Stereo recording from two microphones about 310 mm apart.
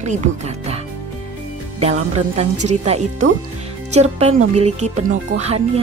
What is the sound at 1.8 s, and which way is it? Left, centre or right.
Speech, right.